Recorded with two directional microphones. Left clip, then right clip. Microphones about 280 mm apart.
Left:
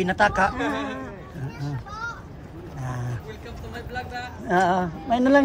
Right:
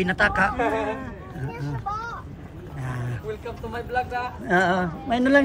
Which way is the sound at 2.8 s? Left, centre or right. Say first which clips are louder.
Even; centre.